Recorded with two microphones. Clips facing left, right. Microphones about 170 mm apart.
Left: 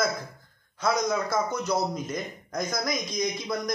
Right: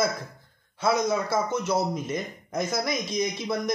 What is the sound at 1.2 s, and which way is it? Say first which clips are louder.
Speech: right 1 dB; 25° right (ahead or behind).